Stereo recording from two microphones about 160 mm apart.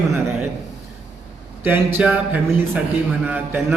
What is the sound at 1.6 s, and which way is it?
A man's voice, 15° right (ahead or behind).